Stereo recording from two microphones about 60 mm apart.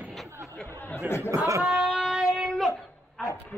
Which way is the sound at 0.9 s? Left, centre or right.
Left.